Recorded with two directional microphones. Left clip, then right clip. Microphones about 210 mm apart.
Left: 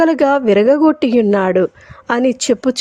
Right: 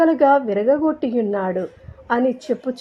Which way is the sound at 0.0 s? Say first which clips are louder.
Left 2 dB; 35° left (ahead or behind).